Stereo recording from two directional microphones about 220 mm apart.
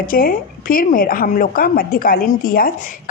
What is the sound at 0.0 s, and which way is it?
A woman's voice, 40° left (ahead or behind).